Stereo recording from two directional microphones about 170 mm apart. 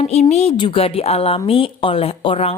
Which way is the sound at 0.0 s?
40° left (ahead or behind).